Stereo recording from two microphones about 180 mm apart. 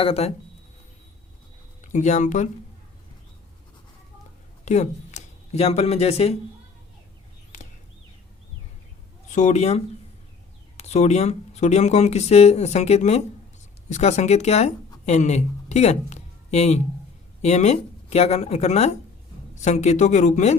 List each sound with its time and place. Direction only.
0.0 s speech: 35° left (ahead or behind)
1.9 s speech: 40° left (ahead or behind)
4.6 s speech: 40° left (ahead or behind)
9.3 s speech: 40° left (ahead or behind)